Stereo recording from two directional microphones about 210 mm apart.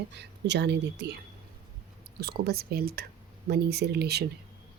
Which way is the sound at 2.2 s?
50° right (ahead or behind).